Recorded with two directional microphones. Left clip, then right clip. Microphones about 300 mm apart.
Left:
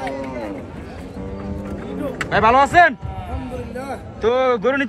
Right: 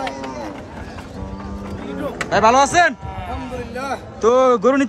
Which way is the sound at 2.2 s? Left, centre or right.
Centre.